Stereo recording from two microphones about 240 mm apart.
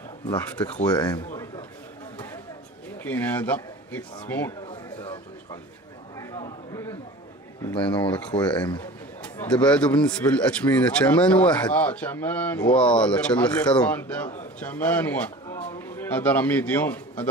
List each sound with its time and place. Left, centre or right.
0.9 s a man's voice: centre
3.0 s speech: centre
4.6 s a sound: left
7.6 s speech: centre
8.7 s a man's voice: centre